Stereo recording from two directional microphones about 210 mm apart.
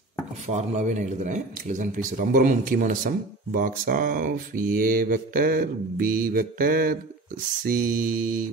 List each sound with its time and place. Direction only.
0.5 s speech: 35° right (ahead or behind)
7.6 s mantra: 45° right (ahead or behind)